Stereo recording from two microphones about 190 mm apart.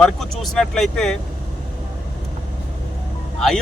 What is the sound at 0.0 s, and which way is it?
Speech, centre (ahead or behind).